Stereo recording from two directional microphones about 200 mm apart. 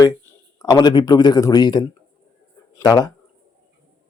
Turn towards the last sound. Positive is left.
turn(degrees=20)  # may be behind; listen again after turning